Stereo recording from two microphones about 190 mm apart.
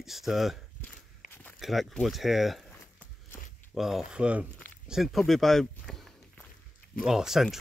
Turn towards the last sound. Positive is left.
turn(degrees=0)  # may be behind; listen again after turning